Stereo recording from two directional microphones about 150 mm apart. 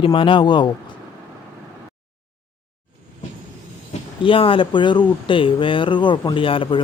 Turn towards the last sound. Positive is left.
turn(degrees=35)  # may be behind; listen again after turning